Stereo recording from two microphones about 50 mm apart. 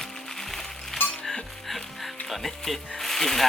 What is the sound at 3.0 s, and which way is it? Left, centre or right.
Snake, centre.